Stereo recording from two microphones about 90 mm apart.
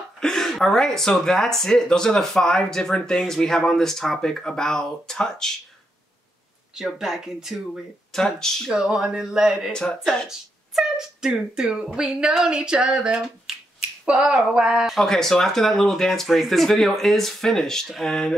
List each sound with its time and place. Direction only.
0.2 s speech: 5° left (ahead or behind)
6.7 s speech: 5° right (ahead or behind)
8.7 s speech: 5° right (ahead or behind)
9.7 s speech: 10° left (ahead or behind)
10.2 s speech: 5° right (ahead or behind)
13.7 s finger snapping: 10° right (ahead or behind)
15.0 s speech: 5° left (ahead or behind)